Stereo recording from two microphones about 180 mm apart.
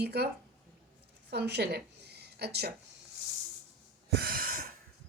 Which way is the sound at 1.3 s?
65° right (ahead or behind).